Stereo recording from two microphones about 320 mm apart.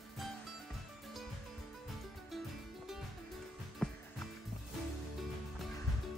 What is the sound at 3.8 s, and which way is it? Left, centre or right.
Music, centre.